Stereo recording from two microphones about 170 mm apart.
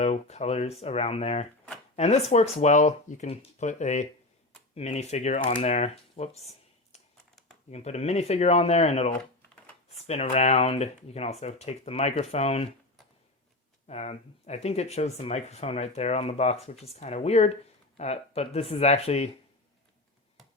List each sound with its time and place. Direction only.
0.0 s speech: 40° left (ahead or behind)
13.8 s speech: 40° left (ahead or behind)